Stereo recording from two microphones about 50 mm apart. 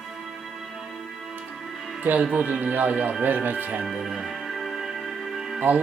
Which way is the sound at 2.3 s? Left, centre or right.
Right.